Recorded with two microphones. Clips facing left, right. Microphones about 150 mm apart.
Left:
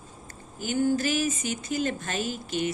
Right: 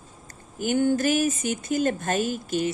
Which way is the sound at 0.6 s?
55° right (ahead or behind).